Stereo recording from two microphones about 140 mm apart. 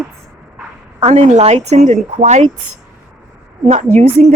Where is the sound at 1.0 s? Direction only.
50° right (ahead or behind).